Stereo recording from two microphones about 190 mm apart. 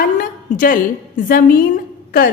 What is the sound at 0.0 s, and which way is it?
A woman's voice, 45° left (ahead or behind).